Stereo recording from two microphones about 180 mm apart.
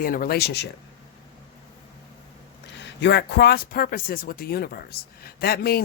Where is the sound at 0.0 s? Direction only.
55° left (ahead or behind).